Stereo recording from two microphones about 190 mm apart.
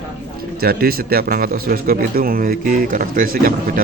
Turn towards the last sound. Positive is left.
turn(degrees=-50)  # may be behind; listen again after turning